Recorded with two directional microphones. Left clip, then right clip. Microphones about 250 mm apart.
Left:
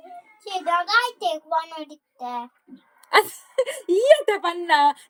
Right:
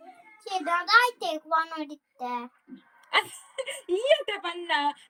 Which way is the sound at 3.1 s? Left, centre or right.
Centre.